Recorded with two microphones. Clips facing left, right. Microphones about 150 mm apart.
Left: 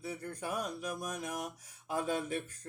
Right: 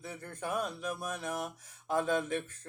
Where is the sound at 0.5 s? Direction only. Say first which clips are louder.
Right 4 dB; 40° left (ahead or behind).